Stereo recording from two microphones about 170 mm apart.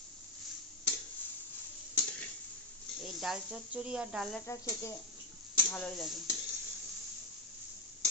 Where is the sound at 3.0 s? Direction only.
Centre (ahead or behind).